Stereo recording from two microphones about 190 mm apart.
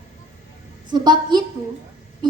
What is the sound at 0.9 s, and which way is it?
Speech, 20° right (ahead or behind).